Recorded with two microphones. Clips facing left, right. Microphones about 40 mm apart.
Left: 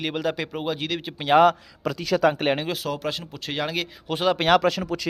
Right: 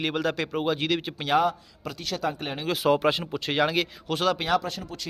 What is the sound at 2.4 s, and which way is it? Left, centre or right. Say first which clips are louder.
Speech: left 10 dB; left.